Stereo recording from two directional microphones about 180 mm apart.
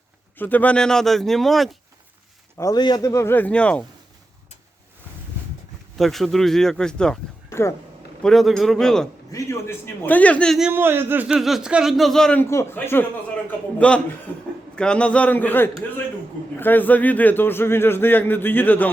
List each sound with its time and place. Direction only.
0.3 s speech: 10° left (ahead or behind)
2.6 s a man's voice: 20° left (ahead or behind)
6.0 s speech: centre (ahead or behind)
9.3 s a man's voice: 15° left (ahead or behind)
10.7 s a man's voice: 10° right (ahead or behind); by 18.9 s 10° left (ahead or behind)